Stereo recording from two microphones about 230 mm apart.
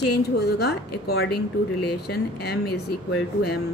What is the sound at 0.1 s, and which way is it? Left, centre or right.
Speech, left.